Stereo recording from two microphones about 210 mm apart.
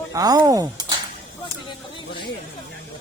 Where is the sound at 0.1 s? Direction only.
15° right (ahead or behind).